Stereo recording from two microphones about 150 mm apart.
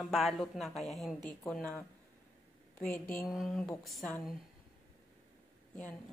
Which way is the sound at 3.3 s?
Centre (ahead or behind).